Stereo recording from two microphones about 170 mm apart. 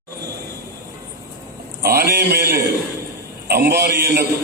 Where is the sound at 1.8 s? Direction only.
65° right (ahead or behind).